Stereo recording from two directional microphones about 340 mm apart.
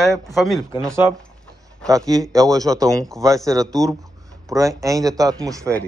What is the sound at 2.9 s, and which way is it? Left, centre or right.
Speech, centre.